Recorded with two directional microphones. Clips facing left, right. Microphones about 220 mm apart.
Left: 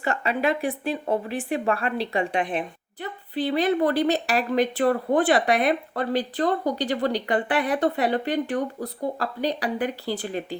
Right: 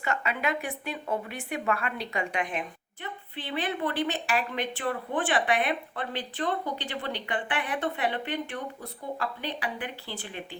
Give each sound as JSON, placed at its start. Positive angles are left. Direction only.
{"t": 0.0, "sound": "speech", "side_deg": 35}